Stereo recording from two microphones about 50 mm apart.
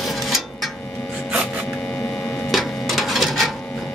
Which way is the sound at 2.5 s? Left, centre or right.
Centre.